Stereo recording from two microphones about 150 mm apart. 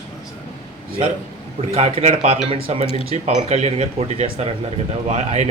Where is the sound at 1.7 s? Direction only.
45° right (ahead or behind).